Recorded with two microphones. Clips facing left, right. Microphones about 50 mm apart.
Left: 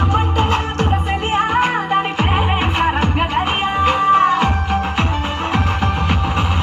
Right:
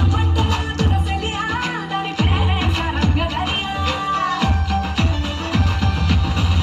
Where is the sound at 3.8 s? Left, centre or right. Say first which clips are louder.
Left 8 dB; left.